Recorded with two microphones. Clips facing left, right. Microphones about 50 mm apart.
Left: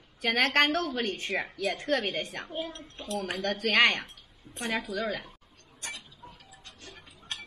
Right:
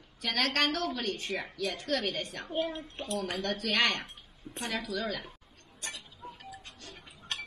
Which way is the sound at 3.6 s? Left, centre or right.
Left.